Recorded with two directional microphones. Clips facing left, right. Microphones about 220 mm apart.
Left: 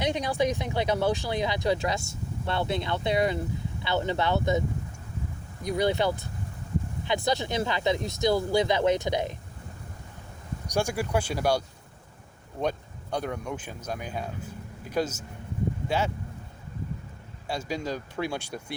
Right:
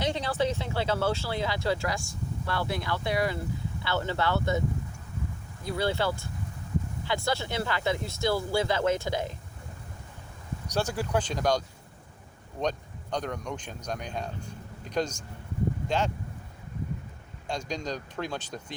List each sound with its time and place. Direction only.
0.0 s speech: 15° left (ahead or behind)
5.6 s speech: 15° left (ahead or behind)
10.7 s speech: 10° left (ahead or behind)
17.4 s speech: 5° left (ahead or behind)